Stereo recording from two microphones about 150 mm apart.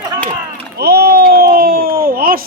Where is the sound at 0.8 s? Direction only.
90° right.